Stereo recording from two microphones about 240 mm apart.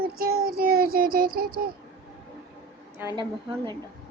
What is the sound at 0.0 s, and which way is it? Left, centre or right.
Child singing, right.